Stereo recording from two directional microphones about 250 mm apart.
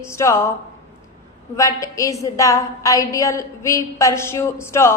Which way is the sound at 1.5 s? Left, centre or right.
Centre.